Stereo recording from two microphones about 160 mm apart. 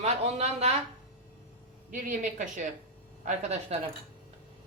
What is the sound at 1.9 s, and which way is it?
Speech, 55° right (ahead or behind).